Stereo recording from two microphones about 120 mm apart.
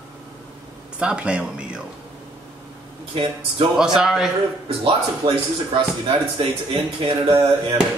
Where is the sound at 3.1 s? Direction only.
45° right (ahead or behind).